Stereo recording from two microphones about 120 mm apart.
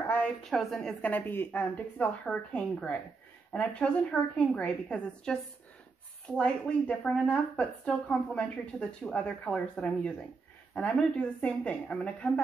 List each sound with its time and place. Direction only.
0.0 s a sound: 15° left (ahead or behind)
0.4 s a woman's voice: centre (ahead or behind)
1.0 s speech: 15° left (ahead or behind)